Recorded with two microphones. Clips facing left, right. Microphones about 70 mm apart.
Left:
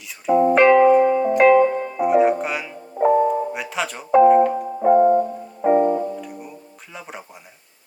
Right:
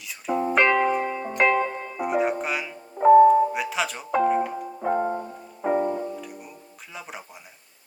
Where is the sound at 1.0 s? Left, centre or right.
Left.